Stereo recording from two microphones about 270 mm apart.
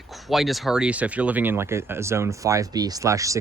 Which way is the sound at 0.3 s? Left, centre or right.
Centre.